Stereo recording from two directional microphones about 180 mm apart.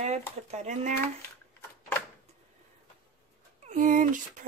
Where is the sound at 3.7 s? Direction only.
45° right (ahead or behind).